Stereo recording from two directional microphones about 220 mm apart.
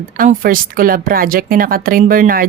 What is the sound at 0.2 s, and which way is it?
A woman's voice, 40° right (ahead or behind).